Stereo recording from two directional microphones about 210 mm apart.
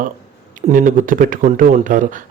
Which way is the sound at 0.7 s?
40° right (ahead or behind).